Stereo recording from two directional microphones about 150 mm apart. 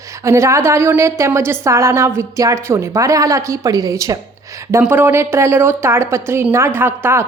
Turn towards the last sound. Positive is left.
turn(degrees=-15)  # may be behind; listen again after turning